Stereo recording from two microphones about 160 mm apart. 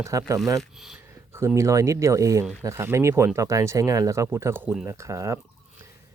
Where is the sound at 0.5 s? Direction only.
5° right (ahead or behind).